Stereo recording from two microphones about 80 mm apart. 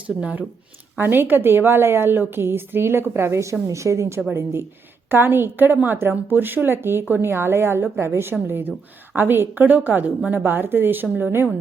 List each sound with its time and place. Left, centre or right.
0.2 s speech: centre
0.9 s a woman's voice: right
5.0 s a woman's voice: right